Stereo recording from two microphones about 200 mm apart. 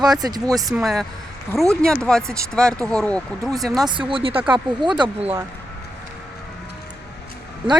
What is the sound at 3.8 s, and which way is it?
Speech, 25° right (ahead or behind).